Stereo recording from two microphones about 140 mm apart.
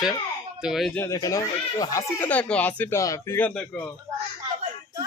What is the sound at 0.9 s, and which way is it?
Speech, 20° left (ahead or behind).